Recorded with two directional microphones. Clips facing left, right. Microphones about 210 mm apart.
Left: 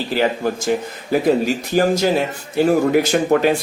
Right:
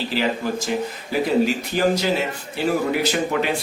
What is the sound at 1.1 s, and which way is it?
Speech, 45° left (ahead or behind).